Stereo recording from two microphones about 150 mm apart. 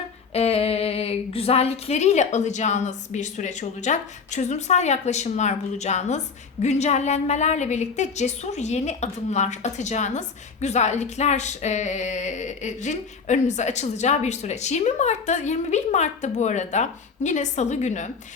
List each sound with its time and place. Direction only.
0.3 s speech: 40° left (ahead or behind)